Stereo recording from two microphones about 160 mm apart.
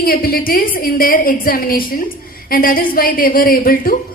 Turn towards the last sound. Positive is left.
turn(degrees=60)  # may be behind; listen again after turning